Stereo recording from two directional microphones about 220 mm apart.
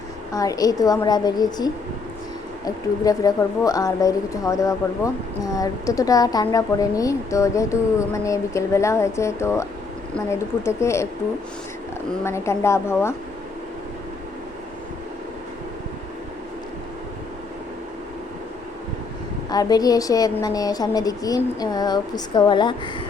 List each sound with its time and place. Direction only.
0.3 s speech: 15° left (ahead or behind)
12.2 s speech: 10° left (ahead or behind)
19.5 s speech: 20° left (ahead or behind)